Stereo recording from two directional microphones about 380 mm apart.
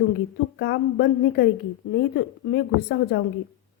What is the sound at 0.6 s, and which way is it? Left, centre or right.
A woman's voice, left.